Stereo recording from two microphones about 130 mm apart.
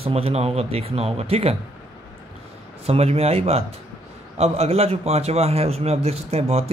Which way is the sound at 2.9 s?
50° right (ahead or behind).